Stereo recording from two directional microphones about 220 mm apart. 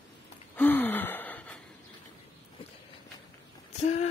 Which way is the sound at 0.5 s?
10° left (ahead or behind).